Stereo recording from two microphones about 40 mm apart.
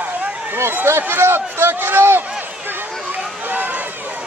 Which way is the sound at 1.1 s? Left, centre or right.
Right.